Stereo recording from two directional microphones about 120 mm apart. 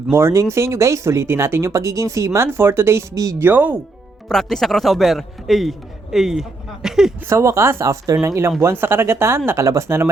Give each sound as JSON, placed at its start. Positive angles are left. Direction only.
{"t": 0.1, "sound": "speech", "side_deg": -20}
{"t": 3.4, "sound": "speech", "side_deg": -15}
{"t": 4.3, "sound": "a man's voice", "side_deg": 5}
{"t": 7.3, "sound": "speech", "side_deg": -25}